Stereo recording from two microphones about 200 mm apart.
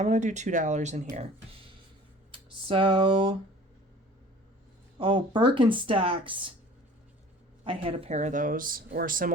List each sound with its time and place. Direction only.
0.0 s speech: 35° right (ahead or behind)
2.3 s speech: 25° right (ahead or behind)
4.9 s speech: 25° right (ahead or behind)
7.6 s speech: 25° right (ahead or behind); by 9.3 s 45° right (ahead or behind)